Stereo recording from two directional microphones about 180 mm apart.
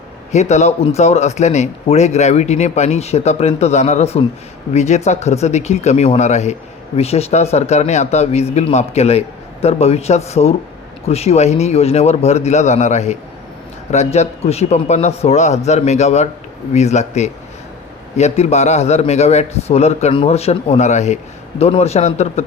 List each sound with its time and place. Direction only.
0.3 s speech: 40° left (ahead or behind)